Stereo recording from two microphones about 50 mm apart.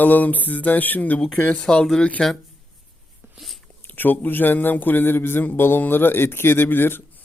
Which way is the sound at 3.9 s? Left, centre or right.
Left.